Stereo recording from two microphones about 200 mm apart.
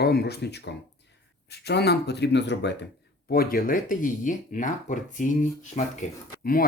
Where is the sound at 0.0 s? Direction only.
55° left (ahead or behind).